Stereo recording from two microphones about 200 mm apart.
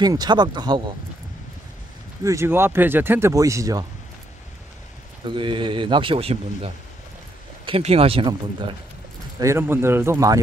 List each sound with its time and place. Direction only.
0.0 s speech: 20° right (ahead or behind)
2.2 s speech: 15° right (ahead or behind)
5.2 s speech: 25° right (ahead or behind)
9.4 s speech: 15° right (ahead or behind)